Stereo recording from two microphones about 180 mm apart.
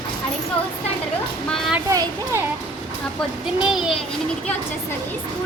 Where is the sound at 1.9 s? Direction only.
15° right (ahead or behind).